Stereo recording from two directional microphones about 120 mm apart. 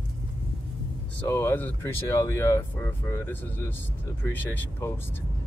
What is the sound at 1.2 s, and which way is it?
Speech, 20° left (ahead or behind).